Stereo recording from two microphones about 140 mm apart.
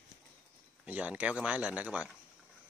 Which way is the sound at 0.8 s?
10° right (ahead or behind).